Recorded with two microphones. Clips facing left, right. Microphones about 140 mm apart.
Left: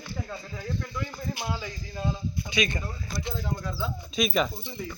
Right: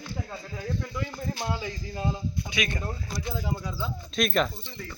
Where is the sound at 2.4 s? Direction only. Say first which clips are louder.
Left 4 dB; 5° right (ahead or behind).